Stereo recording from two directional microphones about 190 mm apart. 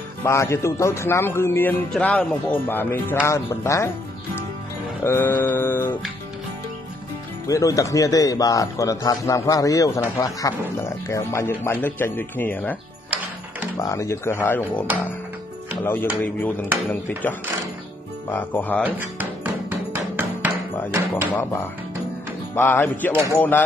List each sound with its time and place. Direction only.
0.2 s speech: 15° left (ahead or behind)
5.0 s speech: 10° left (ahead or behind)
7.4 s speech: 15° left (ahead or behind)
13.7 s speech: 15° left (ahead or behind)
18.8 s music: 10° right (ahead or behind)
21.4 s speech: 10° left (ahead or behind)